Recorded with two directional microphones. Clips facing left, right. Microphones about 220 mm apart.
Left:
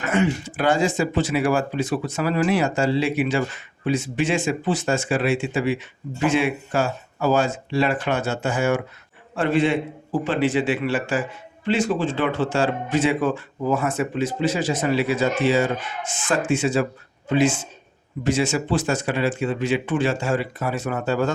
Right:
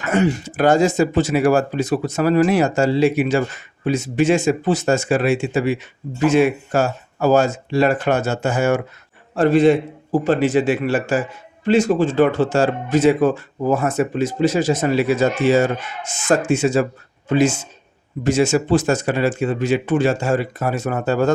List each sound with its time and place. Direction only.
0.1 s a man's voice: 40° right (ahead or behind)